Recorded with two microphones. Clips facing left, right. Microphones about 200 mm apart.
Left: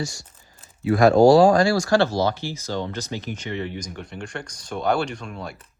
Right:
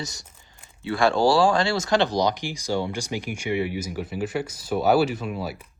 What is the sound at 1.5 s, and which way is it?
Speech, 25° right (ahead or behind).